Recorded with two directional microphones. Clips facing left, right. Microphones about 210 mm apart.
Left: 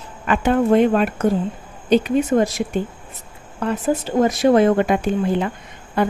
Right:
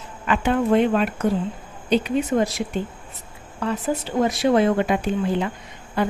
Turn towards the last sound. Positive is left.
turn(degrees=50)  # may be behind; listen again after turning